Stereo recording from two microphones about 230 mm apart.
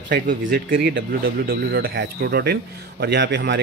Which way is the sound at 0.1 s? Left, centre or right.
Right.